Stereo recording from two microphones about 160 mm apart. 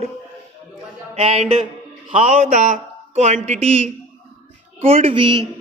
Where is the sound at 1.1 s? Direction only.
45° right (ahead or behind).